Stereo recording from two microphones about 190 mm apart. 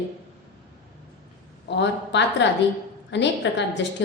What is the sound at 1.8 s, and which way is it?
A woman's voice, 70° left (ahead or behind).